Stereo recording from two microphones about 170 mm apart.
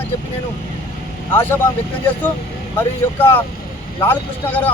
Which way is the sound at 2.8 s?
10° left (ahead or behind).